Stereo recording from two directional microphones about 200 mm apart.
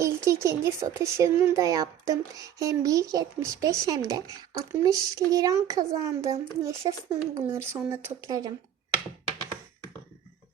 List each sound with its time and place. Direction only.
0.0 s speech: 15° right (ahead or behind)